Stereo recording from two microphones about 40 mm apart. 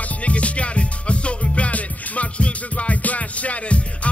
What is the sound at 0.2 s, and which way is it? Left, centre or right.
Music, left.